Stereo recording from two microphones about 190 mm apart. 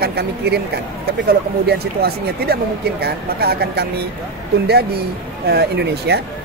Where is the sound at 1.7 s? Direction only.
55° right (ahead or behind).